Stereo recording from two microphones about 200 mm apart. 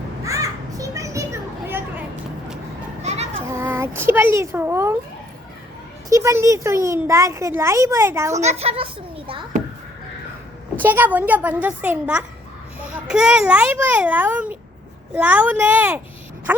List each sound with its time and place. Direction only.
0.3 s children playing: 15° right (ahead or behind)
3.0 s children playing: 35° right (ahead or behind)
3.5 s a child's voice: 10° right (ahead or behind)
6.1 s speech: 15° right (ahead or behind)
8.4 s a child's voice: 30° right (ahead or behind)
10.8 s speech: 10° right (ahead or behind)